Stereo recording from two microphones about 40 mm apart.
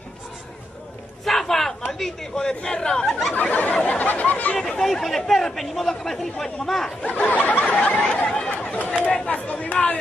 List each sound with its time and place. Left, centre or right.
1.2 s chatter: centre
3.1 s a sound: centre
3.5 s speech: left
4.6 s speech: centre
7.0 s speech: left
8.5 s chatter: left